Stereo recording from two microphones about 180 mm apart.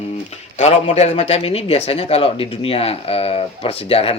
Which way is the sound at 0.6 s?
35° left (ahead or behind).